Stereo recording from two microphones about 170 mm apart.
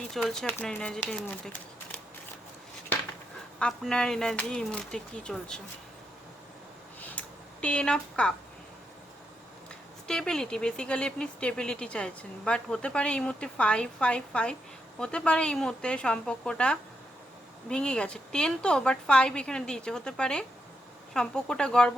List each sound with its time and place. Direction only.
0.1 s speech: centre (ahead or behind)
3.6 s speech: 5° left (ahead or behind)
7.0 s a sound: 5° left (ahead or behind)
10.1 s speech: 5° left (ahead or behind)